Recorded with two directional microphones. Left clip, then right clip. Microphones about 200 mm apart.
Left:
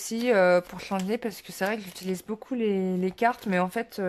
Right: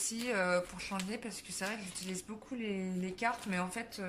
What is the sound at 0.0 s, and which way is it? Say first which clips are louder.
Speech: left 13 dB; 40° left (ahead or behind).